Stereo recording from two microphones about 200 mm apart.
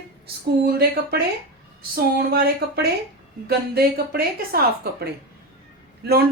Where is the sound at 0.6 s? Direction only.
50° right (ahead or behind).